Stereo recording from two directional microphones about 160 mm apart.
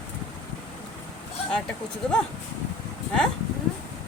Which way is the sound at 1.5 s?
5° left (ahead or behind).